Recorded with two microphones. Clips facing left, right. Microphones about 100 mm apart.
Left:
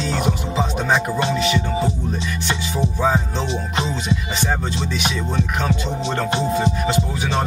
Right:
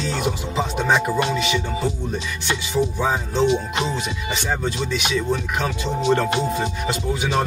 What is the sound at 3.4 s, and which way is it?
Music, 30° left (ahead or behind).